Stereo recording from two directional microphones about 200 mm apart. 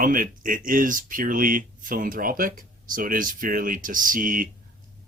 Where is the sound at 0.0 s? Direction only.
45° right (ahead or behind).